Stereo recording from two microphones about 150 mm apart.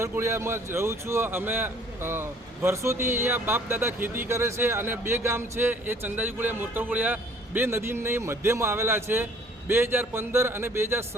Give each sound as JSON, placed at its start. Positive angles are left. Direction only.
{"t": 0.0, "sound": "speech", "side_deg": -20}